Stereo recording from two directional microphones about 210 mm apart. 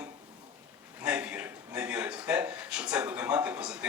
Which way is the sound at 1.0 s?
5° right (ahead or behind).